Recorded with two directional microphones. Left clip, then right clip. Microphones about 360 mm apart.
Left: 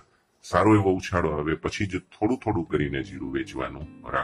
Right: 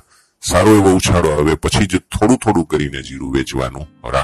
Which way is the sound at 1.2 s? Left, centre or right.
Right.